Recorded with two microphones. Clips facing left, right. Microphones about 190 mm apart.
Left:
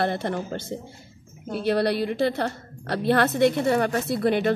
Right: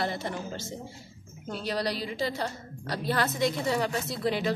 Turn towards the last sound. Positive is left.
turn(degrees=60)  # may be behind; listen again after turning